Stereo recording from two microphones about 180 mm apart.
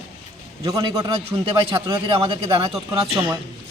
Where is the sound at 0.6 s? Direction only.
20° right (ahead or behind).